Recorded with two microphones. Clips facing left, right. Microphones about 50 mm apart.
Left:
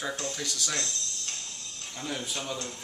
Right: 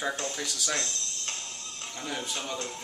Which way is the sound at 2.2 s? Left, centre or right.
Centre.